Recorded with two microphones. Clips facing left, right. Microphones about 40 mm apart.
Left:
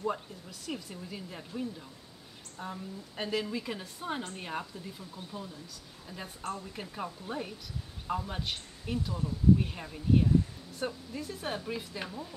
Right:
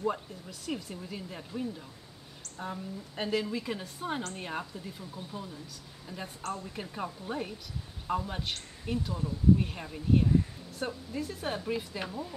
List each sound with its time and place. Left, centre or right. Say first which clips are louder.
0.0 s speech: right 2 dB; centre